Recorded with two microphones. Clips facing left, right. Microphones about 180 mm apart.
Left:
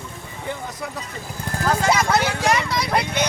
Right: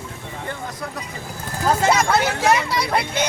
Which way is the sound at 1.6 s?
25° right (ahead or behind).